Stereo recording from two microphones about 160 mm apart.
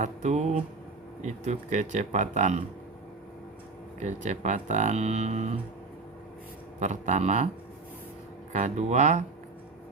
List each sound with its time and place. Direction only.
0.0 s speech: 45° right (ahead or behind)
4.0 s speech: 50° right (ahead or behind)
6.7 s speech: 45° right (ahead or behind)
8.5 s speech: 45° right (ahead or behind)